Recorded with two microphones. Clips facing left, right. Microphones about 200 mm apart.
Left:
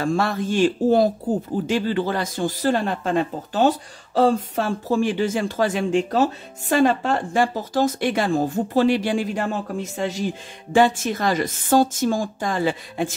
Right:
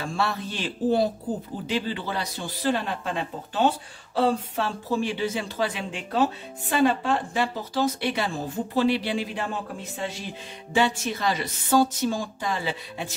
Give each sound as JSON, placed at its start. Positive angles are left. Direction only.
{"t": 0.0, "sound": "speech", "side_deg": 50}